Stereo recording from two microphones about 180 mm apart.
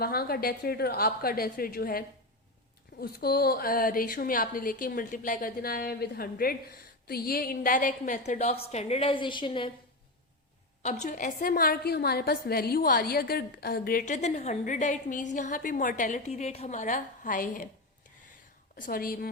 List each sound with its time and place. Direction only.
0.0 s a woman's voice: 60° left (ahead or behind); by 9.7 s 30° left (ahead or behind)
11.0 s a woman's voice: 45° left (ahead or behind)
18.8 s a woman's voice: 55° left (ahead or behind)